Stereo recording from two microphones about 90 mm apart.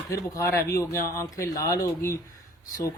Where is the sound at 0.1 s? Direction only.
35° left (ahead or behind).